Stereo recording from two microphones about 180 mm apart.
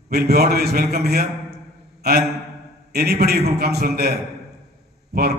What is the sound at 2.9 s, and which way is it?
A man's voice, 60° right (ahead or behind).